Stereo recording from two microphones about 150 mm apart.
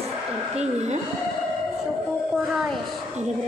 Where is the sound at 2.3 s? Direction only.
Centre (ahead or behind).